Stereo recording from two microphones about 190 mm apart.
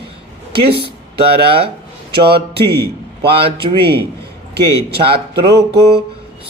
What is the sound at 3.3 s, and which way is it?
Speech, 30° right (ahead or behind).